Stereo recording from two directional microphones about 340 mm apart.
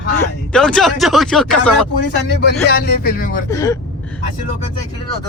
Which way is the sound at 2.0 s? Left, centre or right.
Left.